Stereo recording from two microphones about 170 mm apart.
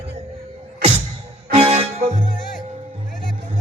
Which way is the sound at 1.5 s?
35° right (ahead or behind).